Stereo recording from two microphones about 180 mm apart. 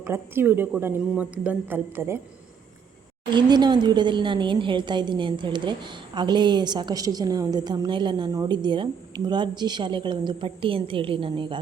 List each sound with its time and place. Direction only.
0.0 s a woman's voice: 15° right (ahead or behind)
3.2 s a woman's voice: 25° right (ahead or behind)